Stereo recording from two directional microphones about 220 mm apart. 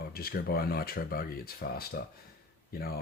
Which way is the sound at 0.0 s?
45° left (ahead or behind).